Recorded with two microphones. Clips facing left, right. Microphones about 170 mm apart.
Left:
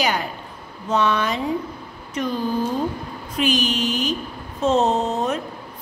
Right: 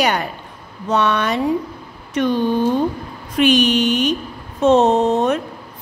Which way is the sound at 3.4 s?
70° right (ahead or behind).